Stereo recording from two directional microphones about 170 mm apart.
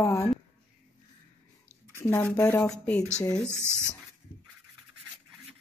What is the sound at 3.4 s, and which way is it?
Speech, 15° right (ahead or behind).